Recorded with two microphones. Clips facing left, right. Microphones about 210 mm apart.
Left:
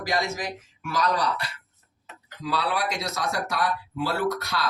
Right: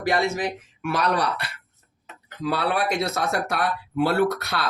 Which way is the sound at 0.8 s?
65° right (ahead or behind).